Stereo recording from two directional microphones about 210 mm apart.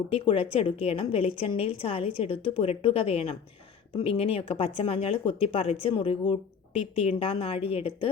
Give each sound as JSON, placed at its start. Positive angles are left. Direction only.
{"t": 0.1, "sound": "a woman's voice", "side_deg": 25}